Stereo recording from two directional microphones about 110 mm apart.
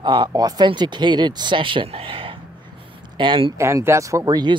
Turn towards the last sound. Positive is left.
turn(degrees=-40)  # may be behind; listen again after turning